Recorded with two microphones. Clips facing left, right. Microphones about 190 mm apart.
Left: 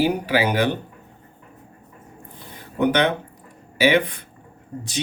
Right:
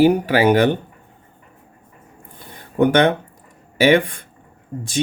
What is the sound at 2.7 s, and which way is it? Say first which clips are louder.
Speech: right 5 dB; 50° right (ahead or behind).